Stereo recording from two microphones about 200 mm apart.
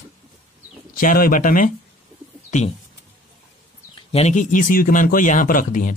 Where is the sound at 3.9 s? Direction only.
35° left (ahead or behind).